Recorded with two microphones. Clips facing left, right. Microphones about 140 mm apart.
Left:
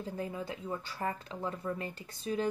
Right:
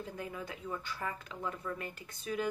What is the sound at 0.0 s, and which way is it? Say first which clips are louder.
Speech: left 4 dB; 30° left (ahead or behind).